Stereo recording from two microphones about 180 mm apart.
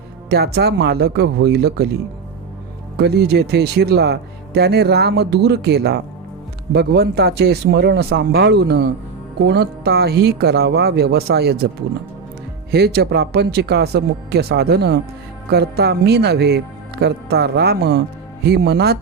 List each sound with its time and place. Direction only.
0.3 s speech: 65° right (ahead or behind)
3.0 s speech: 65° right (ahead or behind)
12.7 s speech: 65° right (ahead or behind)